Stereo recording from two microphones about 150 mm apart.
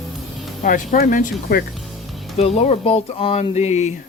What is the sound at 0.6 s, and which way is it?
Speech, 60° left (ahead or behind).